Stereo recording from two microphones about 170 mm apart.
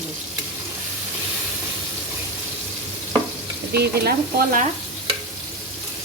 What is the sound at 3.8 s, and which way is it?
Stir, 65° right (ahead or behind).